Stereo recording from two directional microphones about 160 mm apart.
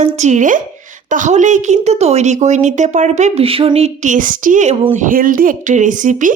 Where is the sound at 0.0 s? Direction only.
45° right (ahead or behind).